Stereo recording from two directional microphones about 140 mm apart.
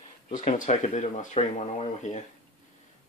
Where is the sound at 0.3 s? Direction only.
65° left (ahead or behind).